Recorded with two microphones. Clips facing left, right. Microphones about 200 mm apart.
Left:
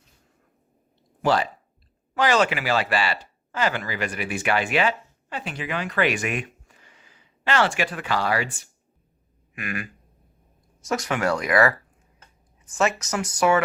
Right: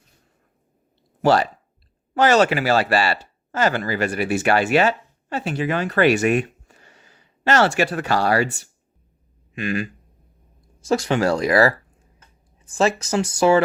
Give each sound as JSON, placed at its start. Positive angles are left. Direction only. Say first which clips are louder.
{"t": 2.1, "sound": "speech", "louder": "right 5 dB", "side_deg": -40}
{"t": 9.6, "sound": "speech", "louder": "right 8 dB", "side_deg": -25}